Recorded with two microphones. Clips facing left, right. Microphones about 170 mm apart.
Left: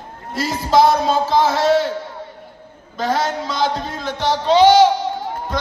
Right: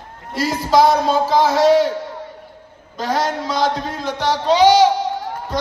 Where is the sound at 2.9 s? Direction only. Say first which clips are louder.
Even; 10° right (ahead or behind).